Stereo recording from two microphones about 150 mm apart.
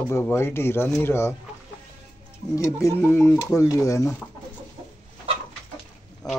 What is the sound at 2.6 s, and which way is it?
Speech, 20° left (ahead or behind).